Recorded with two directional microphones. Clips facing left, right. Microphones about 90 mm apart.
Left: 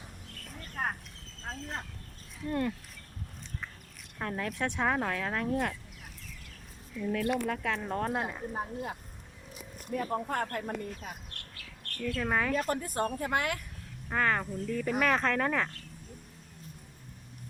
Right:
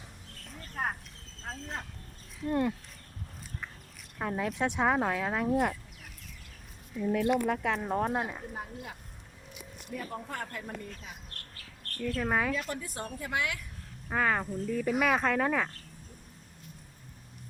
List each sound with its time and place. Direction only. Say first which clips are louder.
0.8 s speech: right 1 dB; 5° right (ahead or behind)
2.5 s speech: right 3 dB; 20° right (ahead or behind)
4.2 s speech: right 3 dB; 10° right (ahead or behind)
7.0 s speech: right 3 dB; 20° right (ahead or behind); by 8.4 s 5° right (ahead or behind)
8.5 s speech: left 5 dB; 35° left (ahead or behind)
9.5 s a sound: left 5 dB; 40° left (ahead or behind)
10.2 s speech: left 6 dB; 50° left (ahead or behind)
11.3 s bird: left 1 dB; 35° right (ahead or behind)
12.2 s speech: even; 5° right (ahead or behind)
12.5 s speech: left 6 dB; 45° left (ahead or behind)
14.1 s speech: even; 10° right (ahead or behind)